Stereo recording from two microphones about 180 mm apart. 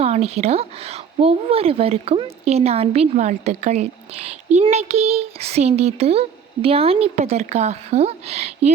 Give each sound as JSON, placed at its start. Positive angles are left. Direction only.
{"t": 0.0, "sound": "speech", "side_deg": -35}